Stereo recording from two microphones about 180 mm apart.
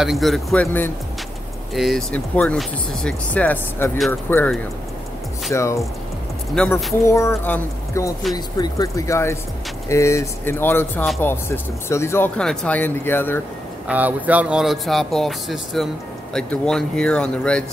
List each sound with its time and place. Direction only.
0.0 s speech: centre (ahead or behind)
5.5 s speech: 15° left (ahead or behind)
6.5 s speech: 5° left (ahead or behind)
7.1 s speech: 15° left (ahead or behind)
13.8 s speech: 10° right (ahead or behind)